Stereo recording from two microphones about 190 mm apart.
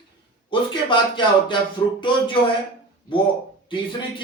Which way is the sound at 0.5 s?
25° left (ahead or behind).